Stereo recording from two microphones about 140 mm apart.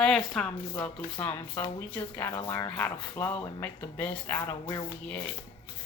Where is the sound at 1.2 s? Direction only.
15° left (ahead or behind).